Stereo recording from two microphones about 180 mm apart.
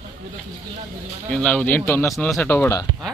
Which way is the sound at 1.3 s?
5° left (ahead or behind).